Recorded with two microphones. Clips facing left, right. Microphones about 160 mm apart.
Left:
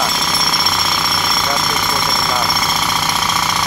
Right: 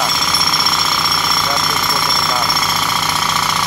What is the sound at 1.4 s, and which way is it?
Vehicle, 10° left (ahead or behind).